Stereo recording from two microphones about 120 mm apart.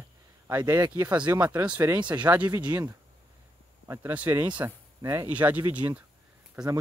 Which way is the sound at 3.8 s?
25° right (ahead or behind).